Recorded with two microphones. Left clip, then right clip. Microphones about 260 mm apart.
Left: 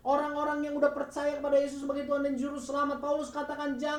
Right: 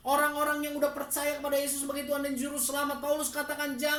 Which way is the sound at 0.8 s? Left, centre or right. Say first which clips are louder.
Left 2 dB; right.